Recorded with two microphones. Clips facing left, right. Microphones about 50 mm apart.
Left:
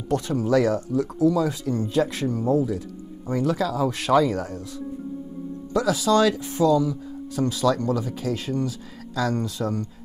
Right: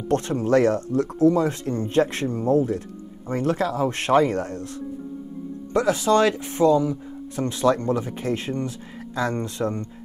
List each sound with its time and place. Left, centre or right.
0.1 s speech: right
5.7 s speech: right